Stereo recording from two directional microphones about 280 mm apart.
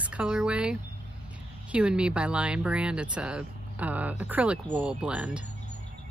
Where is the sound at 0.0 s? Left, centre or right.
Centre.